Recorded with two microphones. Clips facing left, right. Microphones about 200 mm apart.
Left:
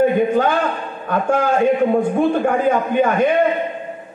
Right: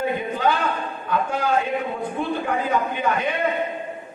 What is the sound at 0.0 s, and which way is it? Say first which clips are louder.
A man's voice: left 8 dB; 50° left (ahead or behind).